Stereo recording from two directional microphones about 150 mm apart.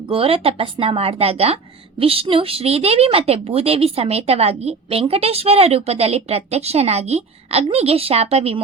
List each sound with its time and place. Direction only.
0.1 s speech: 40° right (ahead or behind)